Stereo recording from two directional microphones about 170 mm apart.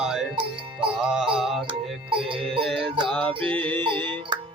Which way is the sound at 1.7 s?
30° right (ahead or behind).